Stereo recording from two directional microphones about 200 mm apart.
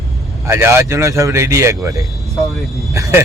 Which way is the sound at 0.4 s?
15° right (ahead or behind).